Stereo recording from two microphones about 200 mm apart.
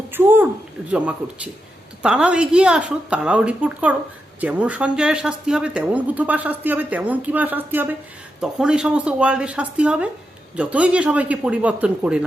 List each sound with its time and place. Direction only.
0.1 s a woman's voice: 10° right (ahead or behind)